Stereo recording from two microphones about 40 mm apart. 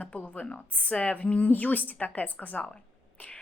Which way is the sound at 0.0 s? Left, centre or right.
Left.